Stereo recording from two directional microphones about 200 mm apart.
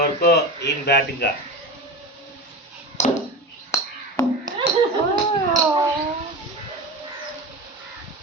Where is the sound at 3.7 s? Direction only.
15° left (ahead or behind).